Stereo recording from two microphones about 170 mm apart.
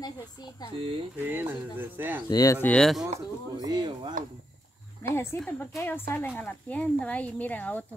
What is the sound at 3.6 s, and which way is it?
Speech, 25° right (ahead or behind).